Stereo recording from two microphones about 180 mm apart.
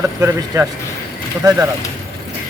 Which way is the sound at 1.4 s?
20° right (ahead or behind).